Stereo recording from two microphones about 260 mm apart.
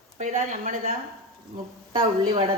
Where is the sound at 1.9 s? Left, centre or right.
Right.